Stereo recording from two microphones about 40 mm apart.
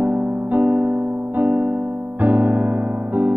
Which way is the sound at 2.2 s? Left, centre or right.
Right.